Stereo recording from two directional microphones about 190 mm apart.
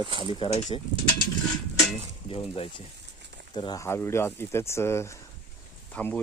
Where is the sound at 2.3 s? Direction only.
30° left (ahead or behind); by 6.2 s 5° left (ahead or behind).